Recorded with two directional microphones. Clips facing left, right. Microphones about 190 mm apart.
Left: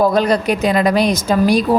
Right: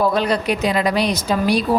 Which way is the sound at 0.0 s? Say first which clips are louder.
Left 4 dB; 45° left (ahead or behind).